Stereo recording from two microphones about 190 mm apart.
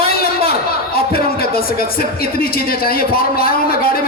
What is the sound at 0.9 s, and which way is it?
Speech, 55° left (ahead or behind).